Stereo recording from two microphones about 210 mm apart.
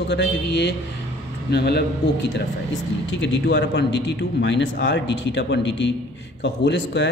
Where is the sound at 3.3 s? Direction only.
60° left (ahead or behind).